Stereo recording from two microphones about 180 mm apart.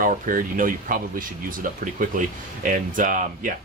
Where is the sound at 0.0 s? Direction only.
50° right (ahead or behind).